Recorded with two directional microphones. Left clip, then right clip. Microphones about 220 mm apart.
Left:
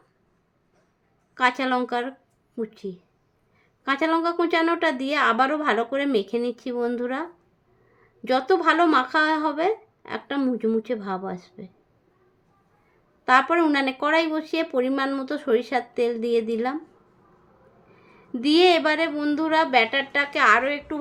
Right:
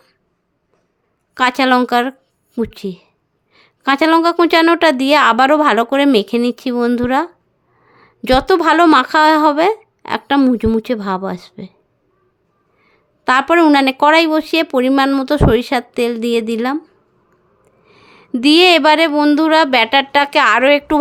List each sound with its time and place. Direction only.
1.3 s a woman's voice: 45° right (ahead or behind)
13.2 s a woman's voice: 45° right (ahead or behind)
17.9 s a woman's voice: 45° right (ahead or behind)